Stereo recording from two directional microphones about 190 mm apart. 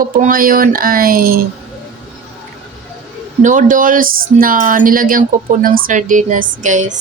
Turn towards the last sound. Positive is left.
turn(degrees=-40)  # may be behind; listen again after turning